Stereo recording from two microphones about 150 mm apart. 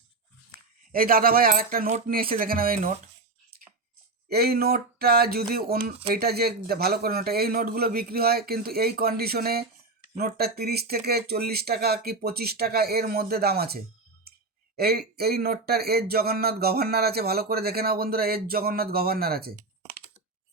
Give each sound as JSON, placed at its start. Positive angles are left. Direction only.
{"t": 0.9, "sound": "speech", "side_deg": -75}
{"t": 4.3, "sound": "speech", "side_deg": -90}